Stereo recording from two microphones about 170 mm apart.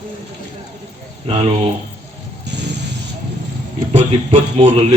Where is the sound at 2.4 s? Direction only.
90° right.